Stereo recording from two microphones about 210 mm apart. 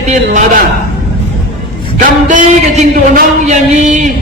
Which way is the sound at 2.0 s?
35° right (ahead or behind).